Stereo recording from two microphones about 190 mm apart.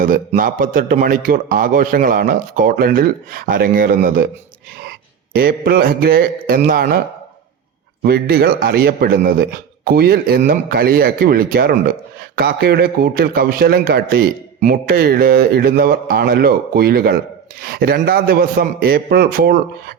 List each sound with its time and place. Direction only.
0.3 s a man's voice: 45° right (ahead or behind)
8.0 s a man's voice: 55° right (ahead or behind)